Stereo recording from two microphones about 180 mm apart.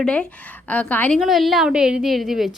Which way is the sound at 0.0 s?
5° left (ahead or behind).